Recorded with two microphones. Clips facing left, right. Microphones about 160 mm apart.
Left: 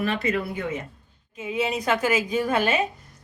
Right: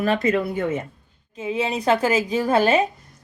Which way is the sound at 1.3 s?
30° right (ahead or behind).